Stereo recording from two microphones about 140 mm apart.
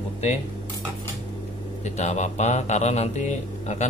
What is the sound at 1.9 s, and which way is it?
Speech, 55° left (ahead or behind).